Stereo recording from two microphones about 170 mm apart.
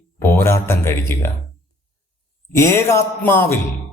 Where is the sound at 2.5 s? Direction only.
15° left (ahead or behind).